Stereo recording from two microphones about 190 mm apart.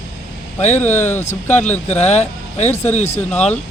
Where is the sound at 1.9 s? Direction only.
35° left (ahead or behind).